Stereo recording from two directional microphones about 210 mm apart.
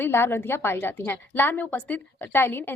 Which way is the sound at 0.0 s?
10° left (ahead or behind).